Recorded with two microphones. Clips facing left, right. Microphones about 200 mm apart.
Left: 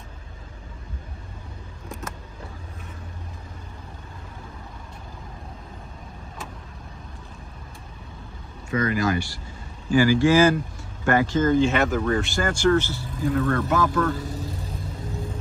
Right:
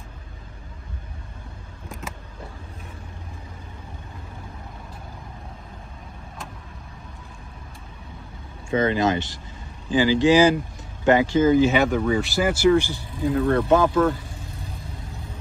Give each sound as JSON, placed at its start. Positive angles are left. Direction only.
{"t": 8.6, "sound": "speech", "side_deg": -25}